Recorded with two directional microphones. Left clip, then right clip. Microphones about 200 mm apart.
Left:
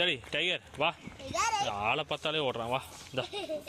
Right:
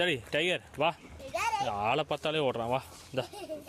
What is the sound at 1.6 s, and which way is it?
Speech, 25° right (ahead or behind).